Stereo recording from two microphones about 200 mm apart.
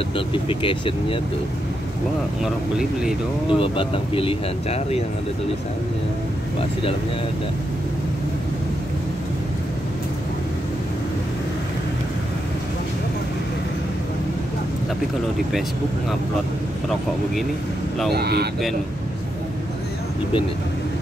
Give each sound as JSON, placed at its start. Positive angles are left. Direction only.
{"t": 0.3, "sound": "speech", "side_deg": 25}
{"t": 2.4, "sound": "speech", "side_deg": 0}
{"t": 3.5, "sound": "speech", "side_deg": 25}
{"t": 6.6, "sound": "speech", "side_deg": 25}
{"t": 18.1, "sound": "speech", "side_deg": -55}